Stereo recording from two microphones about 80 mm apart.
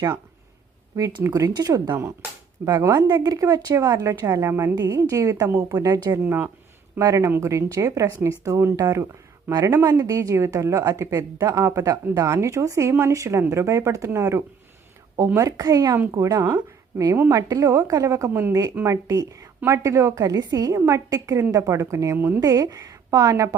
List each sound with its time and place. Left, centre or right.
1.3 s speech: right
1.9 s speech: right
3.2 s speech: right
4.4 s speech: right
4.9 s speech: right
6.1 s speech: right
7.0 s speech: right
9.5 s speech: right
9.7 s speech: right
10.0 s speech: right
15.4 s speech: right
16.4 s speech: right
22.4 s speech: right